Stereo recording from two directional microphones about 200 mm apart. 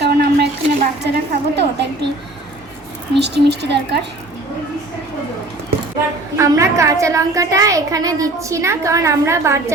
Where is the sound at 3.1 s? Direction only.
60° right (ahead or behind).